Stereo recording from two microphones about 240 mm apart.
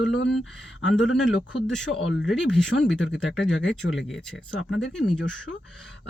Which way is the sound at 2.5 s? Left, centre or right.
Centre.